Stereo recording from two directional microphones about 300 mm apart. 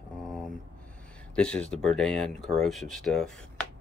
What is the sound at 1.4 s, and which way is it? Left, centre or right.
Speech, centre.